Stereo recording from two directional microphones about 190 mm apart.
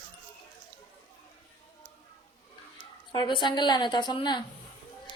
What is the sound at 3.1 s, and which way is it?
A woman's voice, 25° left (ahead or behind).